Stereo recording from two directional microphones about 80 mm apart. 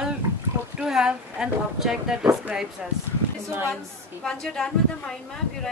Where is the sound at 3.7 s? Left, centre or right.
Centre.